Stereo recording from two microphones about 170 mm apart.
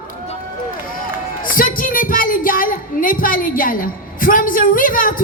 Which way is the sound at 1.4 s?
55° left (ahead or behind).